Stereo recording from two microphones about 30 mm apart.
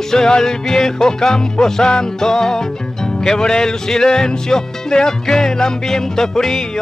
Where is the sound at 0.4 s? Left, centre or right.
Centre.